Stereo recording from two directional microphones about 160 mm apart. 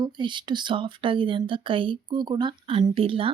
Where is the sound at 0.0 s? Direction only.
30° right (ahead or behind).